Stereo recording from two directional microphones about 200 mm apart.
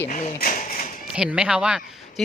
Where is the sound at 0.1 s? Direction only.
45° left (ahead or behind).